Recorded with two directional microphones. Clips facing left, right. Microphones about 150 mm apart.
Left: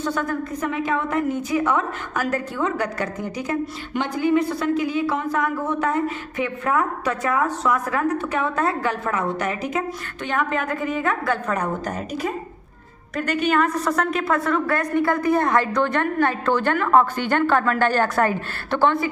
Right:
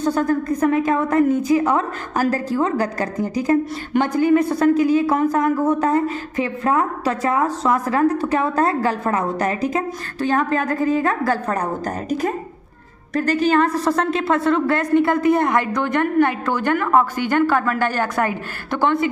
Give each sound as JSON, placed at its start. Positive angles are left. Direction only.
{"t": 0.0, "sound": "a woman's voice", "side_deg": -40}